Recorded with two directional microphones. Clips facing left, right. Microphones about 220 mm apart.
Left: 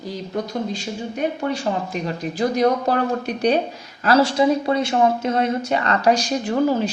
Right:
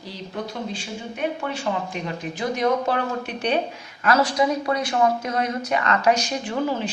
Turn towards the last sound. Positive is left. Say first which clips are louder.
# left 6 dB
turn(degrees=40)  # may be behind; listen again after turning